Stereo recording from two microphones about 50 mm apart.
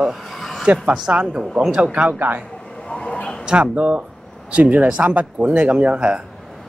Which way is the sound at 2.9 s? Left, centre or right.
Left.